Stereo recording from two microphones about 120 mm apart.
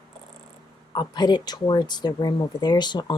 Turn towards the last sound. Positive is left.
turn(degrees=40)  # may be behind; listen again after turning